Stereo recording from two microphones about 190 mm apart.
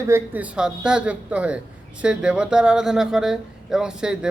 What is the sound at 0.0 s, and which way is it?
Speech, 10° right (ahead or behind).